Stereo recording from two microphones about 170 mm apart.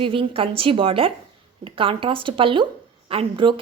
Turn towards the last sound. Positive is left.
turn(degrees=-30)  # may be behind; listen again after turning